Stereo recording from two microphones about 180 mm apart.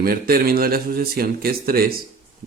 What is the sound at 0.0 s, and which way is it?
Speech, 55° right (ahead or behind).